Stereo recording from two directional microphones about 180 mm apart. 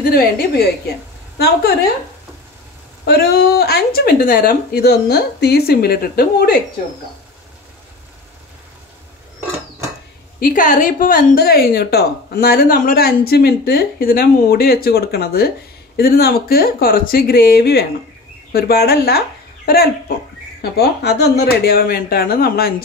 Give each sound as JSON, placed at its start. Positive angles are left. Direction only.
{"t": 0.1, "sound": "a woman's voice", "side_deg": 60}
{"t": 3.1, "sound": "a woman's voice", "side_deg": 60}
{"t": 10.4, "sound": "a woman's voice", "side_deg": 45}